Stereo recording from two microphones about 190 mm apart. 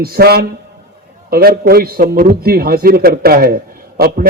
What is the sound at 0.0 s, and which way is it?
A man's voice, 55° right (ahead or behind).